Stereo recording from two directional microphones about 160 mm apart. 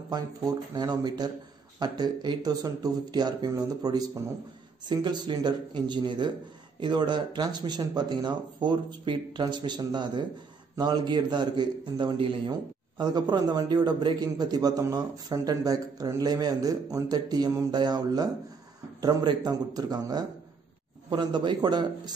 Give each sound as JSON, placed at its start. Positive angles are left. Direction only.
{"t": 0.1, "sound": "a man's voice", "side_deg": -25}